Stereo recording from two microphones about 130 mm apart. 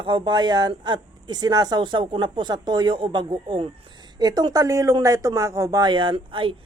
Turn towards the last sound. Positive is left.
turn(degrees=-40)  # may be behind; listen again after turning